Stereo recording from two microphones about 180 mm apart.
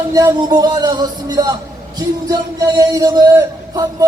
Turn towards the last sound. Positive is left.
turn(degrees=-20)  # may be behind; listen again after turning